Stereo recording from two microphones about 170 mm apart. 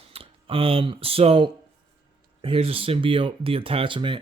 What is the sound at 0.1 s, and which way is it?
Speech, 35° right (ahead or behind).